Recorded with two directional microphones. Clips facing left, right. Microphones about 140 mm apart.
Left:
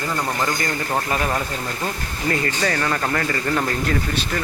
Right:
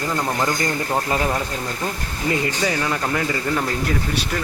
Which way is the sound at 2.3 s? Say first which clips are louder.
Right 1 dB; 10° right (ahead or behind).